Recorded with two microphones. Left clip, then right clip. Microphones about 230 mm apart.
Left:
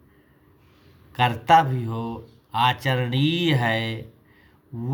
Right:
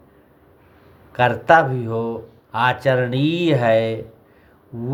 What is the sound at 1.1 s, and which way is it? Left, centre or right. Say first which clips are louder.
Speech: right 3 dB; left.